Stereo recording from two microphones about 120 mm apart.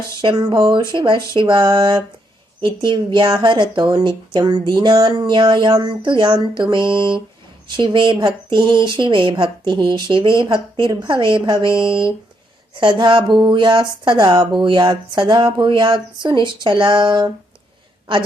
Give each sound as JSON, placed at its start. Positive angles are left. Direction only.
{"t": 0.2, "sound": "a woman's voice", "side_deg": -40}